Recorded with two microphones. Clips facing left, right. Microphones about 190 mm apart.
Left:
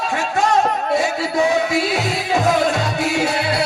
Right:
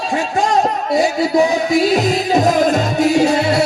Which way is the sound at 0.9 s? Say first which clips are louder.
Right 7 dB; 40° right (ahead or behind).